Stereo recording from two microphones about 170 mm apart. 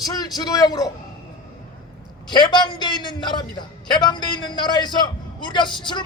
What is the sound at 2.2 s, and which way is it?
A man's voice, 25° left (ahead or behind).